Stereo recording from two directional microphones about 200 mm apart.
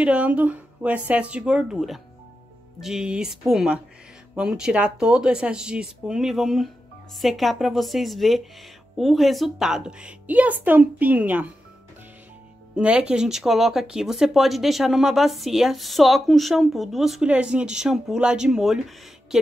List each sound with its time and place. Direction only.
0.0 s a woman's voice: 5° right (ahead or behind)
12.7 s speech: 5° right (ahead or behind)